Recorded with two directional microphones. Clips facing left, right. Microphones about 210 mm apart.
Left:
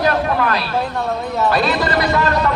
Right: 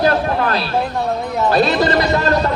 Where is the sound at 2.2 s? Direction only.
35° right (ahead or behind).